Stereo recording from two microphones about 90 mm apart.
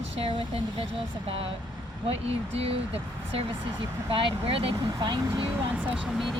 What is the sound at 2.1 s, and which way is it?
Speech, 90° right.